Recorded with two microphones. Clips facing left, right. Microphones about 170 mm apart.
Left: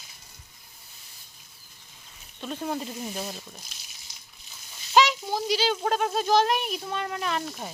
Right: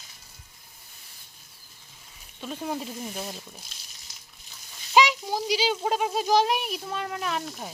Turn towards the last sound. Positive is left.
turn(degrees=0)  # may be behind; listen again after turning